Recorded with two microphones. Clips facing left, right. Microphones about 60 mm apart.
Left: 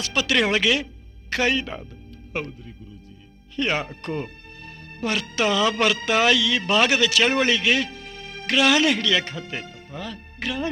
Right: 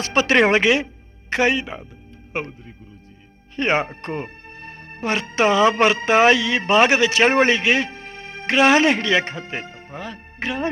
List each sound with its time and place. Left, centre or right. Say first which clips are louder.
0.0 s speech: right 6 dB; right